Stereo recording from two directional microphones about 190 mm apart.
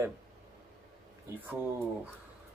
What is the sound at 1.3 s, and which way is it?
Speech, 10° right (ahead or behind).